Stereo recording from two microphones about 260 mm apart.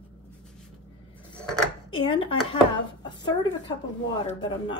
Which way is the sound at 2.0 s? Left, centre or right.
Centre.